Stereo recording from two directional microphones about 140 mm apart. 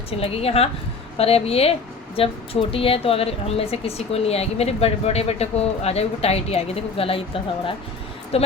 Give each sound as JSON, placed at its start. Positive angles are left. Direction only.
{"t": 0.1, "sound": "a woman's voice", "side_deg": 45}